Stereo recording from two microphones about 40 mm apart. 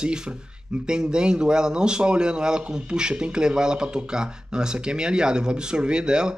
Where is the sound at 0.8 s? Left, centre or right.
Right.